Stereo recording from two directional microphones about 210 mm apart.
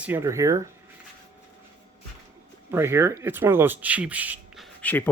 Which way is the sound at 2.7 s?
10° right (ahead or behind).